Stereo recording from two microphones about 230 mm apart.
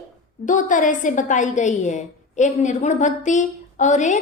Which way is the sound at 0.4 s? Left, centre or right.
Left.